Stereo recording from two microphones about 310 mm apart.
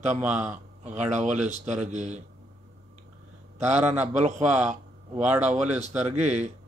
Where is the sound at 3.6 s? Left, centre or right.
Right.